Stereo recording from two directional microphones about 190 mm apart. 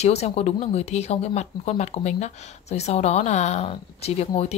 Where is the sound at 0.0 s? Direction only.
35° left (ahead or behind).